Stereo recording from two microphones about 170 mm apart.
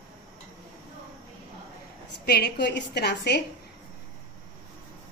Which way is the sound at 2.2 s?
70° left (ahead or behind).